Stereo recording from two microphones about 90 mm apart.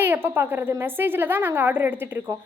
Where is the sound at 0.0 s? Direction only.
25° right (ahead or behind).